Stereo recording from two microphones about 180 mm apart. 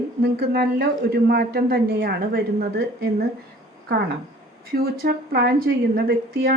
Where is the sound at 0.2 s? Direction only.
60° right (ahead or behind).